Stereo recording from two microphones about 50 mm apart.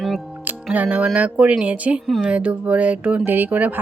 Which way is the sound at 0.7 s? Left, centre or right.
Right.